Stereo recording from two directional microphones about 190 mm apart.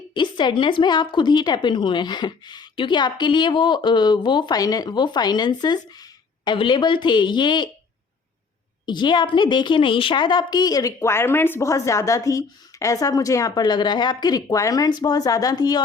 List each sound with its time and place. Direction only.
0.1 s a woman's voice: 25° left (ahead or behind)
8.9 s a woman's voice: 25° left (ahead or behind)